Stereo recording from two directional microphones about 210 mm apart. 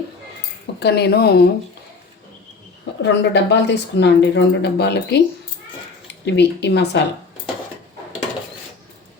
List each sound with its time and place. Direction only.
0.8 s speech: 50° left (ahead or behind)
3.0 s speech: 55° left (ahead or behind)